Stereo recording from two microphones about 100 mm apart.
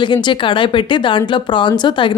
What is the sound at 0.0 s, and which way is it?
Speech, 50° left (ahead or behind).